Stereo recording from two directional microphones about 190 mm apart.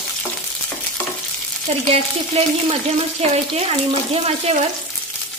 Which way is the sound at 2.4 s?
35° right (ahead or behind).